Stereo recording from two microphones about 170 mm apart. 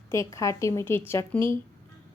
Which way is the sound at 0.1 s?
20° left (ahead or behind).